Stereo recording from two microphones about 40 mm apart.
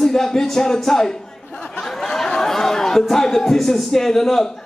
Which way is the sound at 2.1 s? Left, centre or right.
Centre.